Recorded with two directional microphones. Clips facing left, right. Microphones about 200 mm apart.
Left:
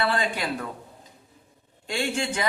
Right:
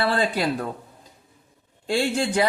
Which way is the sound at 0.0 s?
35° right (ahead or behind).